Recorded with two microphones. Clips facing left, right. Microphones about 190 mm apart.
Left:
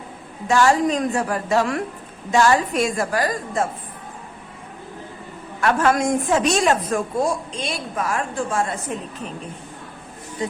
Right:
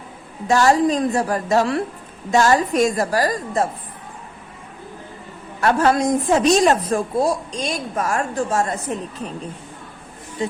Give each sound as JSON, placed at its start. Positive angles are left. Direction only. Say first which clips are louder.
{"t": 0.4, "sound": "a woman's voice", "louder": "right 2 dB", "side_deg": -40}
{"t": 5.5, "sound": "a woman's voice", "louder": "right 2 dB", "side_deg": -35}